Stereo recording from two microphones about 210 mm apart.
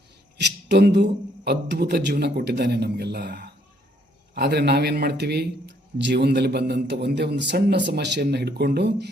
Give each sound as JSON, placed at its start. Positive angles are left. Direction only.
{"t": 0.3, "sound": "a man's voice", "side_deg": -55}